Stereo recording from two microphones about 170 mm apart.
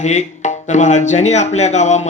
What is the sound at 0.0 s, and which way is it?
Speech, 45° left (ahead or behind).